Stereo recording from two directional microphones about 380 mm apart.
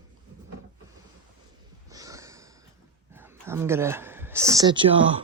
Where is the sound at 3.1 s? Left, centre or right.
Centre.